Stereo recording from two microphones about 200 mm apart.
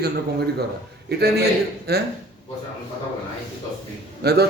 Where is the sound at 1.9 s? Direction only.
55° right (ahead or behind).